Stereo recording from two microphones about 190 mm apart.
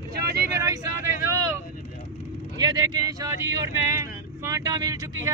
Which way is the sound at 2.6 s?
20° right (ahead or behind).